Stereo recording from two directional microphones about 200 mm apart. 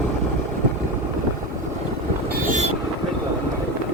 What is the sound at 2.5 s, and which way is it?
Vehicle, 35° right (ahead or behind).